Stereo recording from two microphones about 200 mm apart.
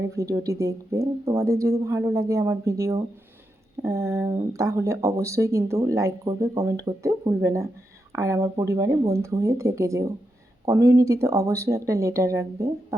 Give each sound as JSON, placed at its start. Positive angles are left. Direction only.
{"t": 0.1, "sound": "speech", "side_deg": -15}